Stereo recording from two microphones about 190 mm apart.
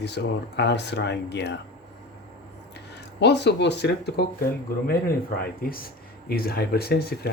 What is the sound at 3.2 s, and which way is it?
Speech, 65° left (ahead or behind).